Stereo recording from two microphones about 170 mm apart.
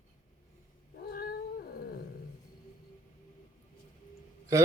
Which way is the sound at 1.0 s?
65° left (ahead or behind).